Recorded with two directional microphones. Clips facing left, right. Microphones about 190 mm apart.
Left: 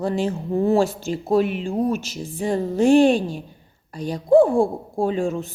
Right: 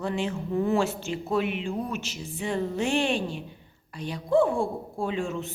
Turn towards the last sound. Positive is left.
turn(degrees=40)  # may be behind; listen again after turning